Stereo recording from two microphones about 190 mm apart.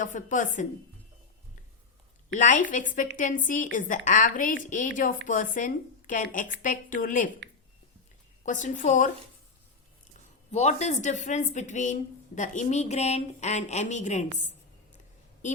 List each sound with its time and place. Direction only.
0.0 s a woman's voice: 45° left (ahead or behind)
2.3 s a woman's voice: 40° left (ahead or behind)
8.4 s a woman's voice: 40° left (ahead or behind)
10.5 s a woman's voice: 35° left (ahead or behind)
14.9 s a sound: 40° left (ahead or behind)